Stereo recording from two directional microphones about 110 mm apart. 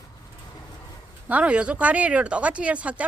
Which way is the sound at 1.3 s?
10° right (ahead or behind).